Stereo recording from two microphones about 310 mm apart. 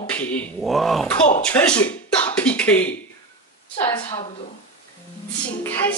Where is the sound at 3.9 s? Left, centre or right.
Centre.